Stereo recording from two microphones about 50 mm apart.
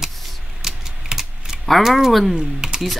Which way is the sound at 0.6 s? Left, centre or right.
Centre.